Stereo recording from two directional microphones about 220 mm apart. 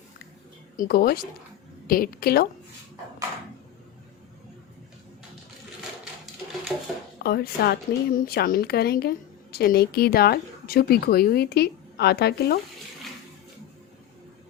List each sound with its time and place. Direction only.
0.8 s a woman's voice: 45° left (ahead or behind)
7.2 s a woman's voice: 45° left (ahead or behind)